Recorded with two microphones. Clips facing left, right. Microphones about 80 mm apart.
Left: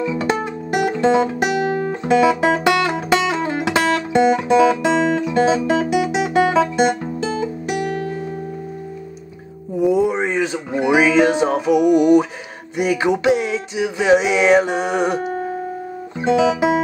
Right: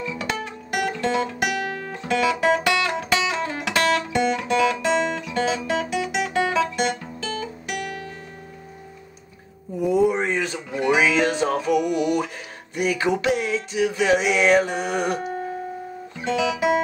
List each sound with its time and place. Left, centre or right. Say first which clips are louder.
0.0 s music: left 8 dB; left
6.8 s guitar: left 8 dB; left
9.8 s music: left 3 dB; centre
15.2 s music: left 5 dB; left
16.2 s music: left 7 dB; left